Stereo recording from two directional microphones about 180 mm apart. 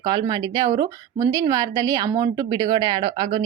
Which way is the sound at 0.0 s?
25° right (ahead or behind).